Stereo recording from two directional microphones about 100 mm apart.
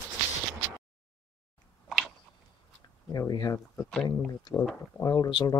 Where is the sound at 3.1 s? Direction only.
40° left (ahead or behind).